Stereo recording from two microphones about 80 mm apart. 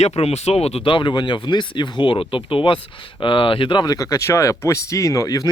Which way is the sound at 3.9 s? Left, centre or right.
Left.